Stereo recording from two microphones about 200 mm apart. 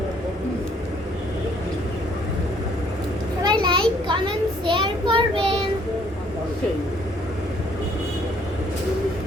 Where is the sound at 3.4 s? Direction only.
20° right (ahead or behind).